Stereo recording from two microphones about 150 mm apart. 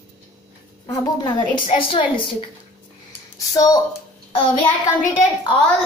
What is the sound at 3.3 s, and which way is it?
Speech, 25° left (ahead or behind).